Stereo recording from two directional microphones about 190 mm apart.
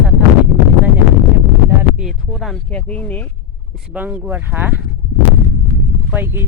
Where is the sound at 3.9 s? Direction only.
10° right (ahead or behind).